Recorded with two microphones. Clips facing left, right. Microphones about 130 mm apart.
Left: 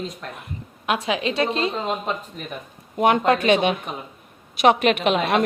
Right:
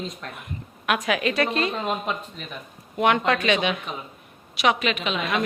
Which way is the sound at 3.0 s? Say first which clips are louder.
Left 3 dB; 40° left (ahead or behind).